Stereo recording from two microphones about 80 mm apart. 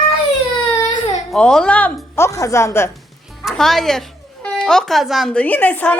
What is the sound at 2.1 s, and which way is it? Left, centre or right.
Speech, left.